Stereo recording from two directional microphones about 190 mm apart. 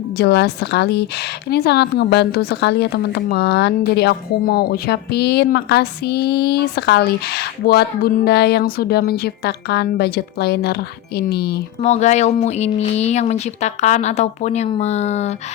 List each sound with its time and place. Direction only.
0.2 s a woman's voice: 60° left (ahead or behind)
11.8 s speech: 35° left (ahead or behind)